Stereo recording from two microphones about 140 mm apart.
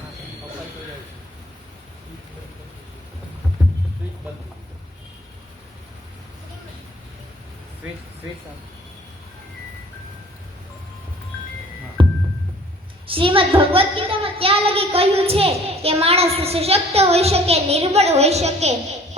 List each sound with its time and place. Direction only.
12.0 s music: 35° right (ahead or behind)
13.1 s a woman's voice: 40° right (ahead or behind)